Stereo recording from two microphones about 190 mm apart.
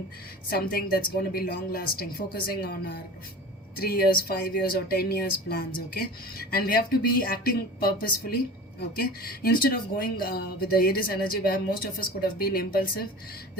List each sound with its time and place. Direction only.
0.5 s speech: 50° left (ahead or behind)